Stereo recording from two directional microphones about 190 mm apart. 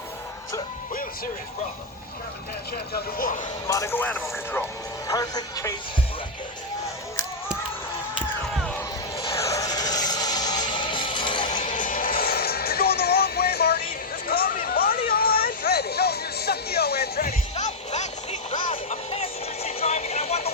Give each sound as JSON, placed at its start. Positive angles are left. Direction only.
{"t": 2.7, "sound": "speech", "side_deg": 50}
{"t": 3.7, "sound": "speech", "side_deg": 15}
{"t": 9.2, "sound": "music", "side_deg": 15}
{"t": 11.6, "sound": "music", "side_deg": 45}
{"t": 14.3, "sound": "hubbub", "side_deg": 50}
{"t": 17.6, "sound": "music", "side_deg": 35}